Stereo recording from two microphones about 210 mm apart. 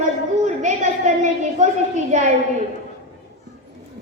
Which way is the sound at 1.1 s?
35° right (ahead or behind).